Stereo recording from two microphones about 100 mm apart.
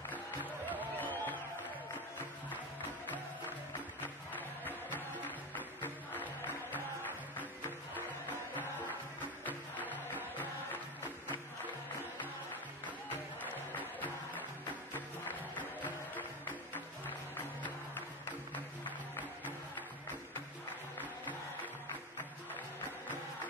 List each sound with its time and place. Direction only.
0.7 s music: 20° left (ahead or behind)
4.3 s music: 20° left (ahead or behind)
9.8 s music: 20° left (ahead or behind)
13.7 s music: 15° left (ahead or behind)